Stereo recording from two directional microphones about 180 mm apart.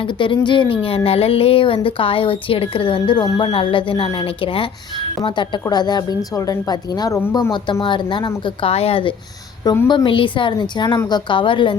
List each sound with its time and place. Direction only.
0.0 s speech: 30° left (ahead or behind)
7.5 s speech: 25° left (ahead or behind)